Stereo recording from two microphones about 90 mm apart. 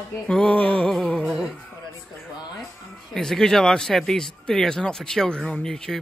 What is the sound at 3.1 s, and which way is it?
Speech, 5° left (ahead or behind).